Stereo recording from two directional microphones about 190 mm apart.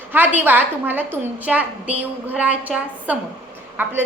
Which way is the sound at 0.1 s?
10° right (ahead or behind).